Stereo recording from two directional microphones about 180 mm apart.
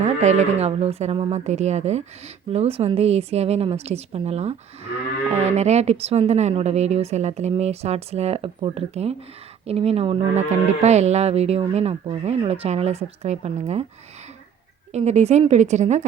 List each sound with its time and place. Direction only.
0.0 s speech: 40° right (ahead or behind)
14.9 s speech: 35° right (ahead or behind)